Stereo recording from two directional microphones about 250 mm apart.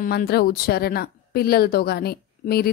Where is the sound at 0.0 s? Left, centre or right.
Left.